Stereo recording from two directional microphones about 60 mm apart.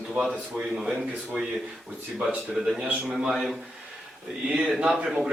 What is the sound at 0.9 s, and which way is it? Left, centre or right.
Speech, centre.